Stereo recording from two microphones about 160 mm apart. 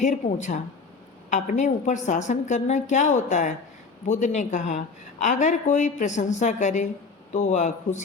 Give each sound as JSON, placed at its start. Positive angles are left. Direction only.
{"t": 0.0, "sound": "a woman's voice", "side_deg": 50}